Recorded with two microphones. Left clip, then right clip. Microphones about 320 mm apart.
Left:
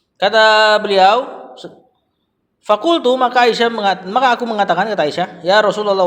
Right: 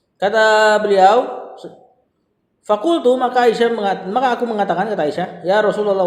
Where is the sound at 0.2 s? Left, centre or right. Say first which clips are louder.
Left 2 dB; left.